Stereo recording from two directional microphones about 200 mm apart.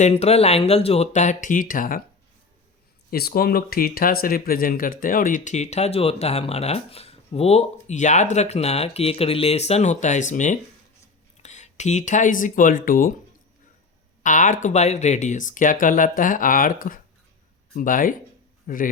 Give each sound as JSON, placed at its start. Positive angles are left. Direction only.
{"t": 0.0, "sound": "speech", "side_deg": 30}
{"t": 3.1, "sound": "speech", "side_deg": 50}
{"t": 14.2, "sound": "speech", "side_deg": 40}